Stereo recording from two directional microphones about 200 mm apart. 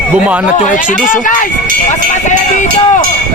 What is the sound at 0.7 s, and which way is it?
Speech, 40° left (ahead or behind).